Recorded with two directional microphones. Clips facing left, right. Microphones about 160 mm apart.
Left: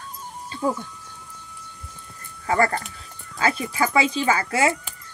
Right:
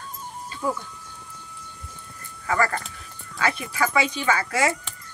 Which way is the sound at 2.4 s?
25° left (ahead or behind).